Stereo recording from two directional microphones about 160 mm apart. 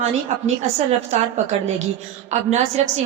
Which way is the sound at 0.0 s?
45° right (ahead or behind).